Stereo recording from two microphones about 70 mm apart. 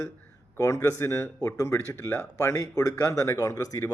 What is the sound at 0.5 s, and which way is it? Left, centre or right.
Speech, left.